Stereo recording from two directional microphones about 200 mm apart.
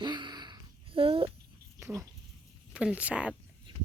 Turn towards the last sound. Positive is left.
turn(degrees=-5)  # may be behind; listen again after turning